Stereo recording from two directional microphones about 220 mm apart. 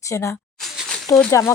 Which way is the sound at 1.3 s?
15° left (ahead or behind).